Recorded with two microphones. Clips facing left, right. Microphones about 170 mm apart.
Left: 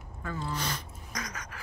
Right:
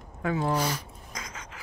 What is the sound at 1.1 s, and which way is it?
Gasp, 25° right (ahead or behind).